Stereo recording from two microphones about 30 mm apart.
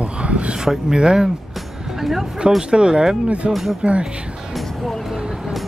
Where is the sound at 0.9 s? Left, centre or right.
Right.